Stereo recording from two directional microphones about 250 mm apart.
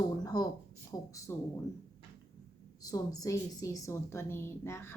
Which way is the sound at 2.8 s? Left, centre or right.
Centre.